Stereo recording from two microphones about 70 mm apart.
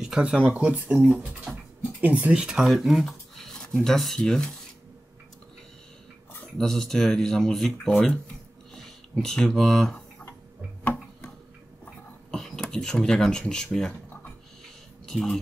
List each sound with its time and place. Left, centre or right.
0.0 s speech: centre; by 2.3 s right
2.3 s speech: centre
6.6 s speech: centre
10.8 s tick-tock: left
12.3 s speech: centre
15.0 s speech: centre